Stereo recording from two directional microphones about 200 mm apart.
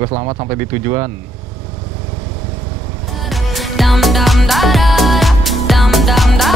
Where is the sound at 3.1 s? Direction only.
Centre (ahead or behind).